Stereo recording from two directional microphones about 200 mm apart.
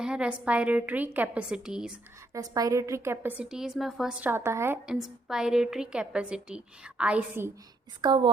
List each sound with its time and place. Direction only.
0.0 s a woman's voice: 5° right (ahead or behind)
2.3 s a woman's voice: 20° right (ahead or behind)
8.0 s a woman's voice: 20° right (ahead or behind)